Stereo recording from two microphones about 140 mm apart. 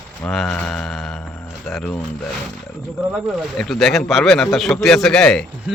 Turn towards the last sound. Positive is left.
turn(degrees=5)  # may be behind; listen again after turning